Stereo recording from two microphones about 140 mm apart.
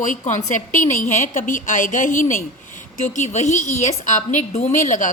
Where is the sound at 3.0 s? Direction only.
60° left (ahead or behind).